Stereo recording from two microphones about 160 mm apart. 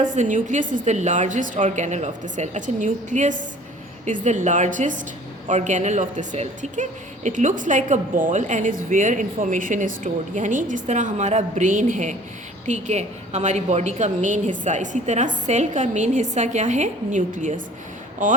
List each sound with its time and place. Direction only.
0.0 s a woman's voice: 50° right (ahead or behind)